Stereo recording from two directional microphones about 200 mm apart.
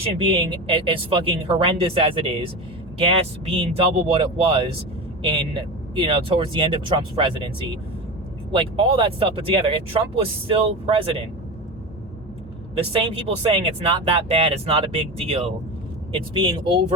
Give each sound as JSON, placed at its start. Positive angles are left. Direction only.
{"t": 0.0, "sound": "speech", "side_deg": -25}
{"t": 8.5, "sound": "speech", "side_deg": -25}
{"t": 12.7, "sound": "speech", "side_deg": -30}